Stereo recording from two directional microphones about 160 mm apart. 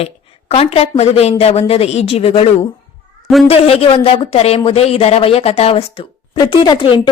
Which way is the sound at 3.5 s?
35° left (ahead or behind).